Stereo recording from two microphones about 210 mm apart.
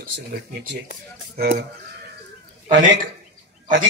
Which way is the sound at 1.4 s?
45° right (ahead or behind).